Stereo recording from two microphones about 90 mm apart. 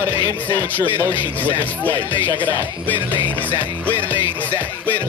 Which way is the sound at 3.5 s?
20° left (ahead or behind).